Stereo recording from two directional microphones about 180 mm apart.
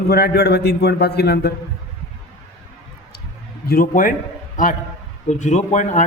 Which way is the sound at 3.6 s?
50° left (ahead or behind).